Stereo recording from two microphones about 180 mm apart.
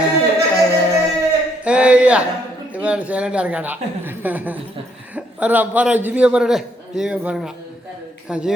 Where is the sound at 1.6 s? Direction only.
5° right (ahead or behind).